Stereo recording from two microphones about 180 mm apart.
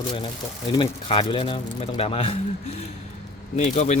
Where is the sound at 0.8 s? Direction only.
30° left (ahead or behind).